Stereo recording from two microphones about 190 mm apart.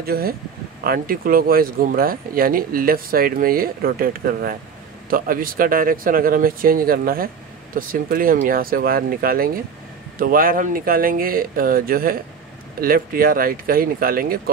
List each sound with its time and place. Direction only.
0.0 s speech: 55° right (ahead or behind)